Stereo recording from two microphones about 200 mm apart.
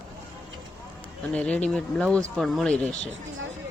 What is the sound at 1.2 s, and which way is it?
Speech, 5° left (ahead or behind).